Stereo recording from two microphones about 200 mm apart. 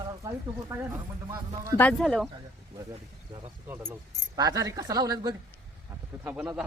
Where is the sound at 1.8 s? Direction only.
5° left (ahead or behind).